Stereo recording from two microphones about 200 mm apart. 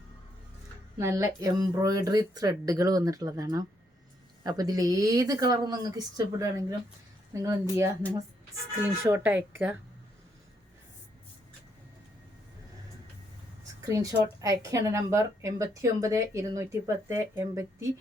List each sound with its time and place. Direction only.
0.9 s a woman's voice: 15° right (ahead or behind)
13.8 s a woman's voice: 15° right (ahead or behind)